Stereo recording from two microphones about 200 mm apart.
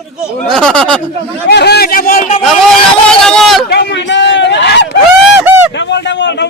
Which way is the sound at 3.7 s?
60° left (ahead or behind).